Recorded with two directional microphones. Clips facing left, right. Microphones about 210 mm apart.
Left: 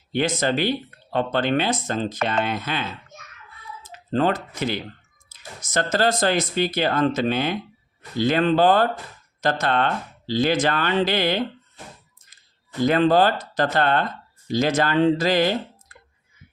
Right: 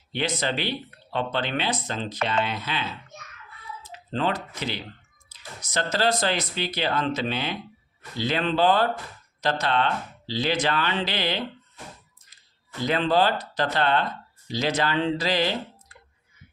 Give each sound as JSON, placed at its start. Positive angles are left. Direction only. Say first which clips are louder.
{"t": 0.1, "sound": "speech", "louder": "left 5 dB", "side_deg": 45}
{"t": 3.8, "sound": "speech", "louder": "left 5 dB", "side_deg": 45}
{"t": 12.8, "sound": "speech", "louder": "left 5 dB", "side_deg": 50}